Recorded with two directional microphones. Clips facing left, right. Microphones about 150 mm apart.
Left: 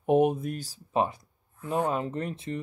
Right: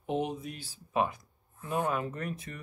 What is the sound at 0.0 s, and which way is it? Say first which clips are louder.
Speech: left 10 dB; 55° left (ahead or behind).